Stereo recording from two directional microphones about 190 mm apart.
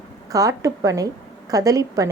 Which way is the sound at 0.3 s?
20° right (ahead or behind).